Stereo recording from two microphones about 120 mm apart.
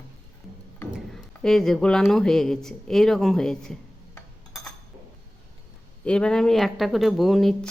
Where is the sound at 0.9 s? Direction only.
5° left (ahead or behind).